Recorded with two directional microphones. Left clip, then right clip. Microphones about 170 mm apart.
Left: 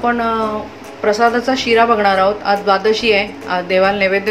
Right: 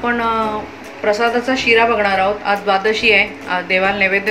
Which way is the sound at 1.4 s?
70° left (ahead or behind).